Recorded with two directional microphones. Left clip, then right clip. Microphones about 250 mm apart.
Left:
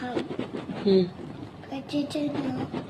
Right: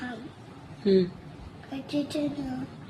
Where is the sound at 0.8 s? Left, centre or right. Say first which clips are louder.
Left 1 dB; right.